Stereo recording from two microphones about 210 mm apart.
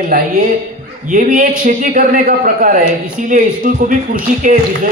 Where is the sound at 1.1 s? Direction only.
40° right (ahead or behind).